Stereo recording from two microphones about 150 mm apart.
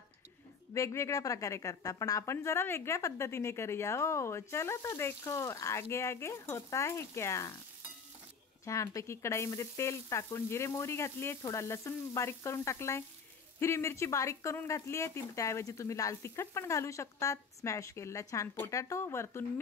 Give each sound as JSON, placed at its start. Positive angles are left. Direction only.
{"t": 0.7, "sound": "a woman's voice", "side_deg": 20}
{"t": 8.6, "sound": "a woman's voice", "side_deg": 20}